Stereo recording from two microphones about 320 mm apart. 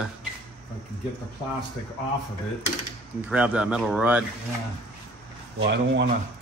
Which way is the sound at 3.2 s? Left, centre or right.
Centre.